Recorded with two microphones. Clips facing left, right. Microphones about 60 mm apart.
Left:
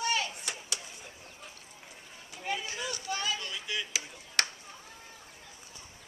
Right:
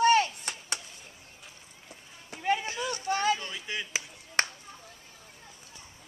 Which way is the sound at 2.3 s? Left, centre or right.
Right.